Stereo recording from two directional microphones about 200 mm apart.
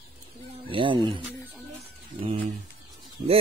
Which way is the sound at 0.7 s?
25° right (ahead or behind).